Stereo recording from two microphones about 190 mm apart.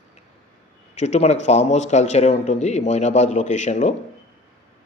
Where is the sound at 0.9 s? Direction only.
35° left (ahead or behind).